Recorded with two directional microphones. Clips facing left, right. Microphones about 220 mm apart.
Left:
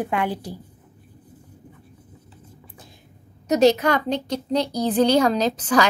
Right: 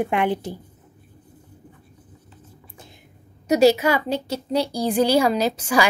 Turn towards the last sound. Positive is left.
turn(degrees=-10)  # may be behind; listen again after turning